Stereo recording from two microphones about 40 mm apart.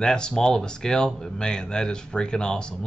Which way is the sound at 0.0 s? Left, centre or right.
Centre.